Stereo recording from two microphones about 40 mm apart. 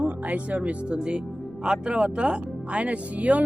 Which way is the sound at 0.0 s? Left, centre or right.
Right.